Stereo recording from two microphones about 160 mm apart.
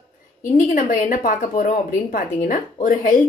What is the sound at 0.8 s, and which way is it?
A woman's voice, 55° left (ahead or behind).